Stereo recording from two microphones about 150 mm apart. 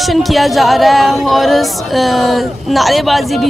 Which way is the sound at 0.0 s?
Centre (ahead or behind).